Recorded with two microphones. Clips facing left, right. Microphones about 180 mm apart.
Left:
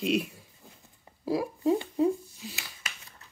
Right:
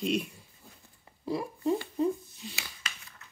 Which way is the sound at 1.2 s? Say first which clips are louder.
Left 4 dB; 5° left (ahead or behind).